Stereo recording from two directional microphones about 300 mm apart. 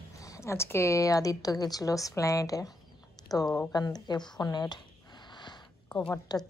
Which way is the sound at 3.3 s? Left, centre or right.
Centre.